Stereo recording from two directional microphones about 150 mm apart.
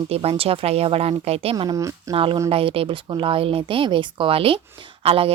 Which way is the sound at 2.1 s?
35° right (ahead or behind).